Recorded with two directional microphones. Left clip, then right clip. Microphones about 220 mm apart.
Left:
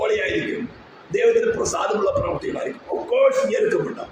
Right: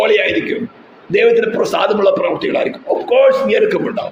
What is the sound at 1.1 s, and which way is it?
A man's voice, 40° right (ahead or behind).